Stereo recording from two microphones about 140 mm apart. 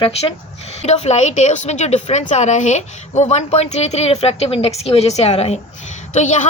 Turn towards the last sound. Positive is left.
turn(degrees=60)  # may be behind; listen again after turning